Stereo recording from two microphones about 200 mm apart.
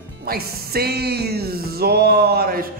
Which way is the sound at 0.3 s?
50° right (ahead or behind).